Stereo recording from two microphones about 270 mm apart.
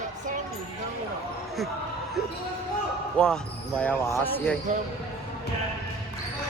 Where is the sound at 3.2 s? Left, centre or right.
Centre.